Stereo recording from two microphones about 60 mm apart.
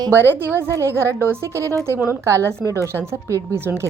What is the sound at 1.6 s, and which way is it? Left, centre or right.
A woman's voice, right.